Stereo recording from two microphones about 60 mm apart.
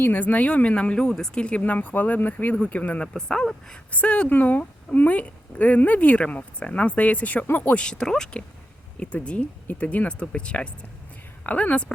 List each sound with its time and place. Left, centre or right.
0.0 s a woman's voice: left
3.1 s a woman's voice: centre
7.9 s a woman's voice: centre